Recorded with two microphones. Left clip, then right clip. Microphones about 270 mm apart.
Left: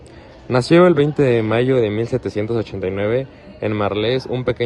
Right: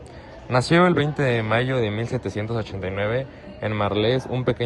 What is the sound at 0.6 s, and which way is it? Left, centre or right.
Speech, left.